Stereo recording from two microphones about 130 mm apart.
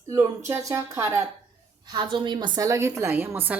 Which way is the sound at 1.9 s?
35° right (ahead or behind).